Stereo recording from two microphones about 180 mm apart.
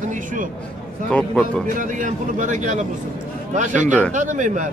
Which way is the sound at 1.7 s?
45° right (ahead or behind).